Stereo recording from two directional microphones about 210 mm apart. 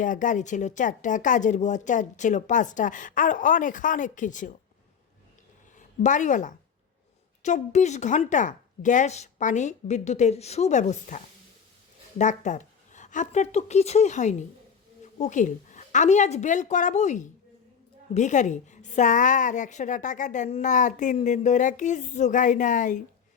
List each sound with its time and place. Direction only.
0.0 s a woman's voice: 40° left (ahead or behind)
6.0 s a woman's voice: 35° left (ahead or behind)